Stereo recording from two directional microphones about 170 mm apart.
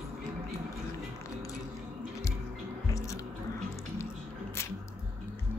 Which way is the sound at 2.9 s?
20° left (ahead or behind).